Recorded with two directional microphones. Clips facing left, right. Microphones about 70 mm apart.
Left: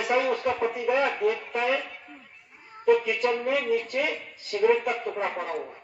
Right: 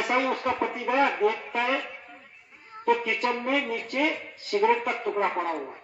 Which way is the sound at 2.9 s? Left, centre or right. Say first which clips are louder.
Left 3 dB; right.